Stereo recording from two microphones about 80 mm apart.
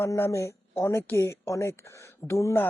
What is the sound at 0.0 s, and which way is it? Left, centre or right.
Speech, left.